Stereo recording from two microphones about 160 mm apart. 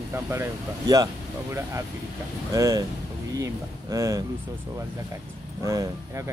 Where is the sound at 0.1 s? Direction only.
15° right (ahead or behind).